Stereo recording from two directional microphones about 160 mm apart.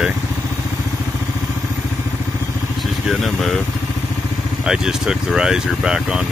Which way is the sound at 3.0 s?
Centre (ahead or behind).